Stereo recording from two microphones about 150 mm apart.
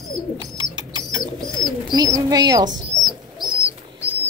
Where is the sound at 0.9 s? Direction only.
30° right (ahead or behind).